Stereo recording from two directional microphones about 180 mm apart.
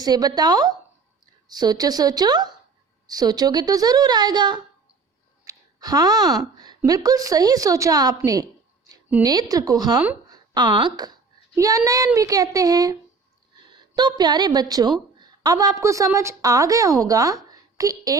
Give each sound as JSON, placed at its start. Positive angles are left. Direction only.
{"t": 0.0, "sound": "a woman's voice", "side_deg": -20}
{"t": 10.3, "sound": "a sound", "side_deg": -25}
{"t": 11.9, "sound": "a woman's voice", "side_deg": -20}